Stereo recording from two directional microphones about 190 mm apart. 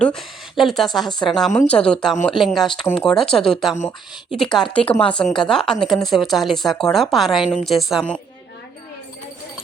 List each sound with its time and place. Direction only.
0.0 s speech: centre (ahead or behind)
4.6 s speech: 30° left (ahead or behind)
5.1 s speech: 5° left (ahead or behind)